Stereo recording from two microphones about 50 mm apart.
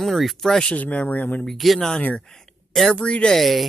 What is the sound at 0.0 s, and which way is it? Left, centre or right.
Speech, centre.